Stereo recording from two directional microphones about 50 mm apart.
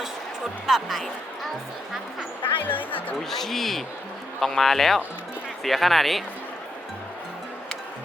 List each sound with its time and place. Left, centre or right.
0.7 s speech: centre
2.6 s speech: left
3.2 s speech: centre